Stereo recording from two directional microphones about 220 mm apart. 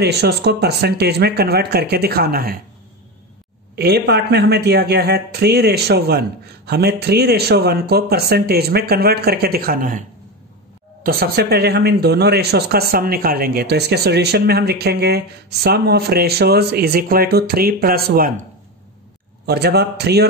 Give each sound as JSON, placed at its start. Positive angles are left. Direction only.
{"t": 0.0, "sound": "speech", "side_deg": -50}
{"t": 3.7, "sound": "speech", "side_deg": -45}
{"t": 19.4, "sound": "speech", "side_deg": -45}